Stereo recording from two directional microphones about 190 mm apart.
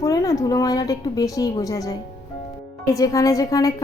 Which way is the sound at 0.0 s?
20° left (ahead or behind).